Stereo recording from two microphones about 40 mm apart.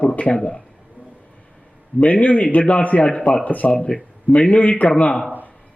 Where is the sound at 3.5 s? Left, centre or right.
Left.